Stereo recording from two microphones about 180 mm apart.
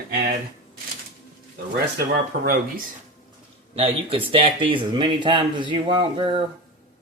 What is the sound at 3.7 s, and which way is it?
Speech, 30° right (ahead or behind).